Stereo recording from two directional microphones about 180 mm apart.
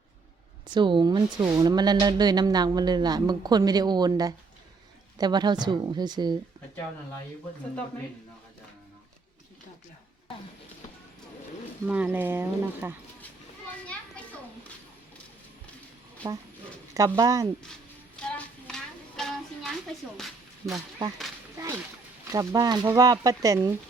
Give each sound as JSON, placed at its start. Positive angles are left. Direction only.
{"t": 0.7, "sound": "speech", "side_deg": -25}
{"t": 11.9, "sound": "speech", "side_deg": -10}
{"t": 13.8, "sound": "children playing", "side_deg": 5}
{"t": 16.2, "sound": "speech", "side_deg": -20}
{"t": 18.2, "sound": "child singing", "side_deg": 5}
{"t": 20.1, "sound": "music", "side_deg": 0}
{"t": 21.6, "sound": "speech", "side_deg": -20}